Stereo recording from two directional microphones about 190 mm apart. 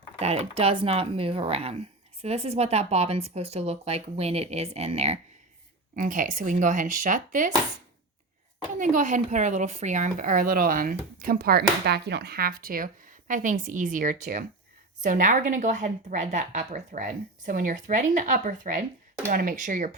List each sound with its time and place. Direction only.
0.2 s a woman's voice: 35° right (ahead or behind)
8.8 s a woman's voice: 40° right (ahead or behind)